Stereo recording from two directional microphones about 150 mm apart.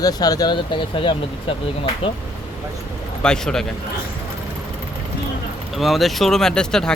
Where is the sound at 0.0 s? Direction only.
25° left (ahead or behind).